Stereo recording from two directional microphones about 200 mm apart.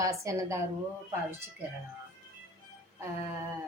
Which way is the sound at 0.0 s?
15° right (ahead or behind).